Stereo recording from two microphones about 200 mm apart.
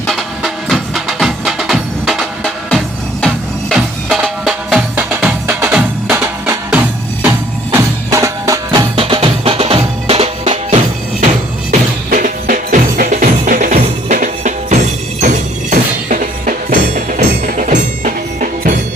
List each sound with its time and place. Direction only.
0.1 s music: centre (ahead or behind); by 10.8 s 30° right (ahead or behind)
12.1 s music: 45° right (ahead or behind)